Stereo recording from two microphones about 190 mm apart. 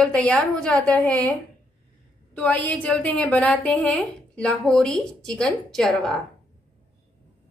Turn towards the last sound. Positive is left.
turn(degrees=5)  # may be behind; listen again after turning